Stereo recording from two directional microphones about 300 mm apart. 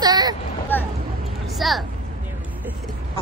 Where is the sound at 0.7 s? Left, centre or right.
Centre.